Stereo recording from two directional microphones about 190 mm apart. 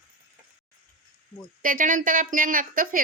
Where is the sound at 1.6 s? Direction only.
45° right (ahead or behind).